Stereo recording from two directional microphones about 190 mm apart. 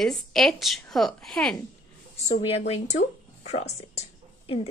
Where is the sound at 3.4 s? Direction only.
35° left (ahead or behind).